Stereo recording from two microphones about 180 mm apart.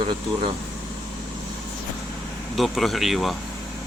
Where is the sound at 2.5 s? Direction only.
Centre (ahead or behind).